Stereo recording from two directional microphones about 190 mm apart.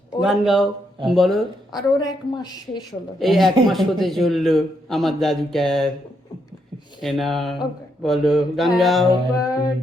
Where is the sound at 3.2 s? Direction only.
Centre (ahead or behind).